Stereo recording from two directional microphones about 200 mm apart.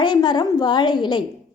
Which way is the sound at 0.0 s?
20° left (ahead or behind).